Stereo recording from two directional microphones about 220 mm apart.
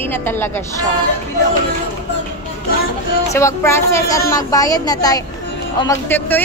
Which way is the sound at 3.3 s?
10° left (ahead or behind).